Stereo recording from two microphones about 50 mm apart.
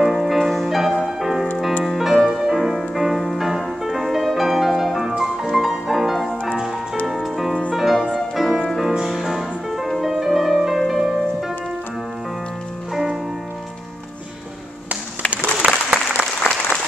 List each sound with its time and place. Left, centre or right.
0.0 s music: centre
12.9 s music: centre
15.6 s applause: right